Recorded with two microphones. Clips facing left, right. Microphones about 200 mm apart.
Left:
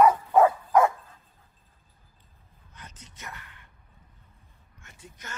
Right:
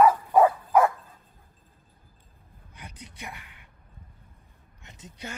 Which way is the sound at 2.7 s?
10° right (ahead or behind).